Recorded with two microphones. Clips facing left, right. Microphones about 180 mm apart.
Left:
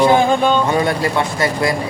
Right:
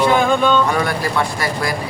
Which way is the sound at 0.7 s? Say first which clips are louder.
Left 3 dB; 25° left (ahead or behind).